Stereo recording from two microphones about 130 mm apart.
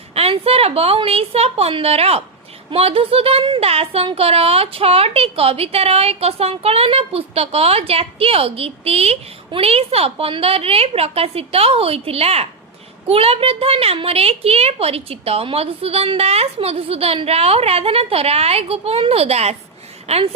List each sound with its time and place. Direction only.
0.1 s speech: 50° right (ahead or behind)